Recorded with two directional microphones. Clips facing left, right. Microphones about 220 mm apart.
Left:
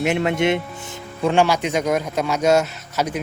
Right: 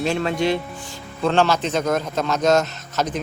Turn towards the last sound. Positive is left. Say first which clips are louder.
# left 1 dB
turn(degrees=10)  # may be behind; listen again after turning